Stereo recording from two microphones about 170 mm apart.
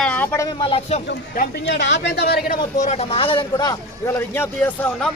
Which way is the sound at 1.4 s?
80° left.